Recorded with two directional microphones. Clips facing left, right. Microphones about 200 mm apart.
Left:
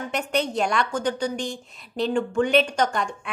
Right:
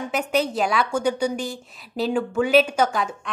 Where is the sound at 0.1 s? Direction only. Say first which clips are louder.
Right 2 dB; centre (ahead or behind).